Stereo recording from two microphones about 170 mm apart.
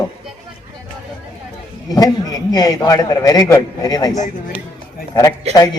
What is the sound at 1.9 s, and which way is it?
A man's voice, 20° left (ahead or behind).